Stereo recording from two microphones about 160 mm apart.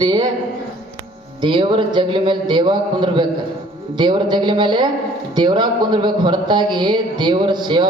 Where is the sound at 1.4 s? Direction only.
30° right (ahead or behind).